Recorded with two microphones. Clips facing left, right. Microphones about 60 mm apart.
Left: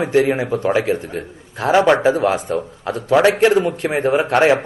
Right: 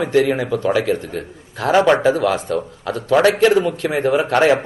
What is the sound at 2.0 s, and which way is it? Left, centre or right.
A man's voice, left.